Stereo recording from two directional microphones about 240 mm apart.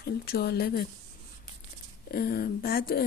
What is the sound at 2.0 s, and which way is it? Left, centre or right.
Speech, left.